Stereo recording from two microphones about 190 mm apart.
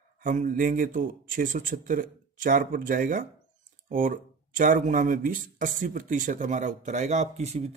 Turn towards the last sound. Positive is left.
turn(degrees=-35)  # may be behind; listen again after turning